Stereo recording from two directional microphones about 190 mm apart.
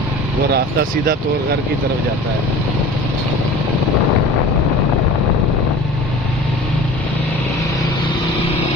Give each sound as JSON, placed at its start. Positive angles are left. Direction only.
{"t": 0.5, "sound": "speech", "side_deg": -50}